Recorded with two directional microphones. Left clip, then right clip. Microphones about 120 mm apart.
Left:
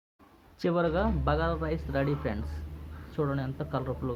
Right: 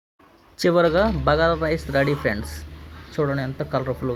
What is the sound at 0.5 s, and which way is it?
Speech, 40° right (ahead or behind).